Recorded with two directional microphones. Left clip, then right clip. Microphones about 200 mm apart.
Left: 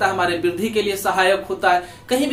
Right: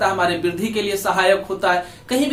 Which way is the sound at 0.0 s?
Centre (ahead or behind).